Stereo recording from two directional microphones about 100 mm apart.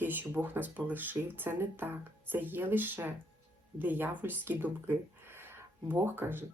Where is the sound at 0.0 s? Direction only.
20° right (ahead or behind).